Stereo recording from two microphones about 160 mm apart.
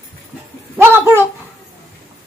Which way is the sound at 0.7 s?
15° right (ahead or behind).